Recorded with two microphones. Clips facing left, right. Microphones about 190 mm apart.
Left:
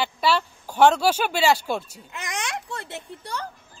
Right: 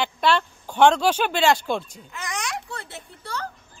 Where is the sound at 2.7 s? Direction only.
20° left (ahead or behind).